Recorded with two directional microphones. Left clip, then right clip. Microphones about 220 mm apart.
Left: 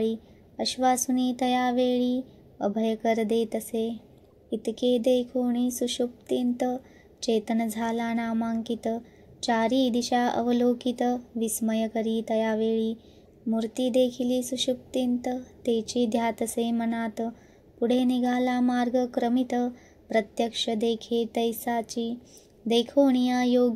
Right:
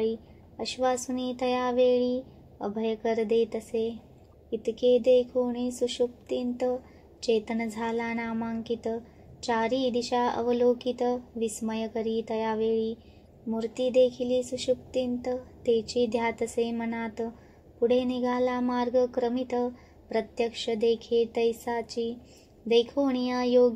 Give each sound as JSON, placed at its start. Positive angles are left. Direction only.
{"t": 0.6, "sound": "a woman's voice", "side_deg": 50}